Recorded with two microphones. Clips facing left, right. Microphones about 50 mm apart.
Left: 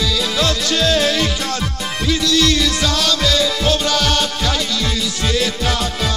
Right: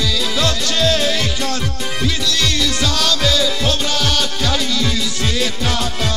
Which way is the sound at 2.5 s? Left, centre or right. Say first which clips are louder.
Left 1 dB; centre.